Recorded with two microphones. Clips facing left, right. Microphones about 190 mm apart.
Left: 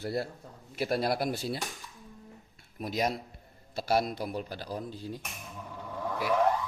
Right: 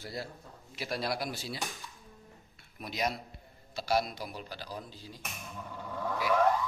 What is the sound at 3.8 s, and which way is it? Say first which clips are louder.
Speech: left 3 dB; 55° left (ahead or behind).